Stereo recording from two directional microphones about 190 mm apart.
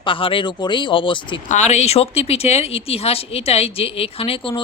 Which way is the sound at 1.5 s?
35° left (ahead or behind).